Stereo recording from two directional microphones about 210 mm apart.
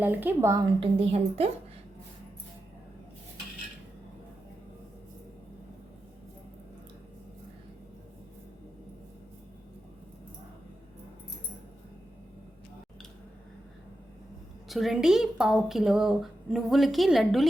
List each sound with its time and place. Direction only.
0.0 s a woman's voice: 10° right (ahead or behind)
0.8 s a woman's voice: 30° right (ahead or behind)
14.7 s a woman's voice: centre (ahead or behind)